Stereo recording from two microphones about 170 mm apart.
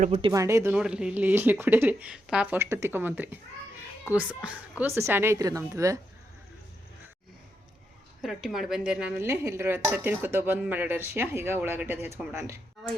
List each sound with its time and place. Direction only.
0.1 s speech: 30° right (ahead or behind)
0.3 s a woman's voice: 15° right (ahead or behind)
8.2 s a woman's voice: centre (ahead or behind)